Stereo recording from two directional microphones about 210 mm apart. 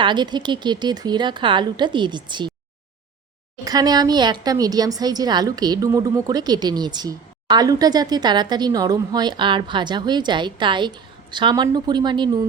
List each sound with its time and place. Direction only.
0.0 s speech: 20° right (ahead or behind)
3.6 s speech: 20° right (ahead or behind)